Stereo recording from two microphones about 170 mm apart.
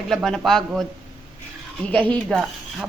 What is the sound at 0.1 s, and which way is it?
Dishes, centre (ahead or behind).